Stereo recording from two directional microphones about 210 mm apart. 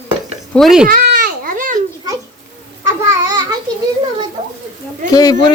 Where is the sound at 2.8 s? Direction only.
15° right (ahead or behind).